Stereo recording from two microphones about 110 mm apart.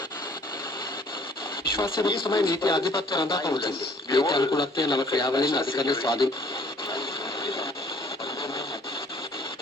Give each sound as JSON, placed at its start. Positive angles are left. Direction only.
{"t": 2.0, "sound": "a man's voice", "side_deg": 45}